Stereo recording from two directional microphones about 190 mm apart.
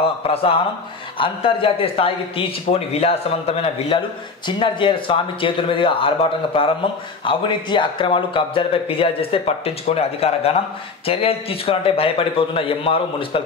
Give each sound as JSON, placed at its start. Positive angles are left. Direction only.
{"t": 0.3, "sound": "a man's voice", "side_deg": 30}